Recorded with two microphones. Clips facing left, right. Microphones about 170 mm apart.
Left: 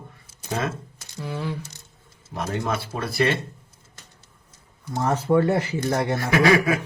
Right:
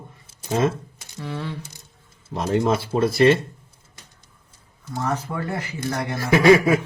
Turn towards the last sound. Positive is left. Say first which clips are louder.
# right 4 dB
turn(degrees=-25)  # may be behind; listen again after turning